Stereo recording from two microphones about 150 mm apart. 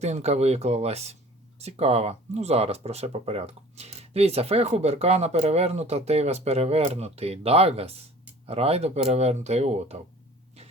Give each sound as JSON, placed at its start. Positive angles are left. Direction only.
{"t": 0.0, "sound": "speech", "side_deg": -45}